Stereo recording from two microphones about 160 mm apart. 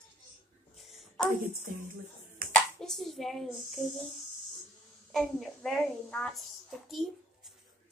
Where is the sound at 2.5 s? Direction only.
5° left (ahead or behind).